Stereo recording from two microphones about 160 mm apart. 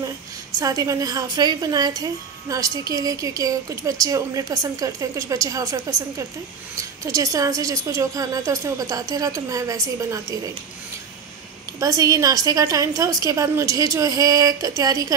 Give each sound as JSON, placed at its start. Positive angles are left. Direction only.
{"t": 0.6, "sound": "a woman's voice", "side_deg": -20}
{"t": 11.8, "sound": "a woman's voice", "side_deg": -20}